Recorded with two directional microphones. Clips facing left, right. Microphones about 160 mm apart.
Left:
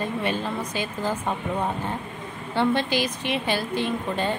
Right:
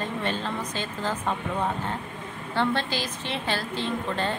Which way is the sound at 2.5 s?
15° left (ahead or behind).